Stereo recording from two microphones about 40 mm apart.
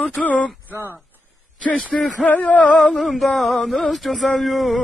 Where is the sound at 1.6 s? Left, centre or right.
Left.